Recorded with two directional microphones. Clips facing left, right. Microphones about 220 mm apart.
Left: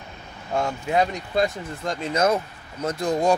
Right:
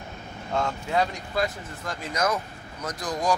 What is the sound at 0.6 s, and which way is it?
Speech, 15° left (ahead or behind).